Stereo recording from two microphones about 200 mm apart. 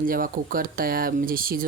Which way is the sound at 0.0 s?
45° right (ahead or behind).